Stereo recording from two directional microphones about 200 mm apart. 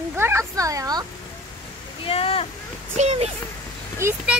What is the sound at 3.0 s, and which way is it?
Speech, 30° right (ahead or behind).